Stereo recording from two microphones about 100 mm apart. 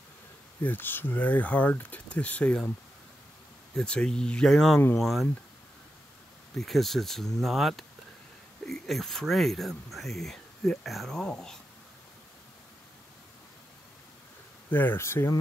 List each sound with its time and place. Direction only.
0.7 s speech: 20° left (ahead or behind)
3.7 s speech: 10° left (ahead or behind)
6.6 s speech: centre (ahead or behind)
14.7 s speech: 20° left (ahead or behind)